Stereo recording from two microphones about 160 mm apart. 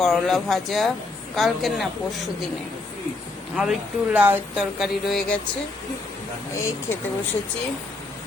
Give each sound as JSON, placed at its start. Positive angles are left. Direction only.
{"t": 0.0, "sound": "speech", "side_deg": 0}
{"t": 3.5, "sound": "speech", "side_deg": -5}
{"t": 4.8, "sound": "speech", "side_deg": 0}
{"t": 6.5, "sound": "speech", "side_deg": 20}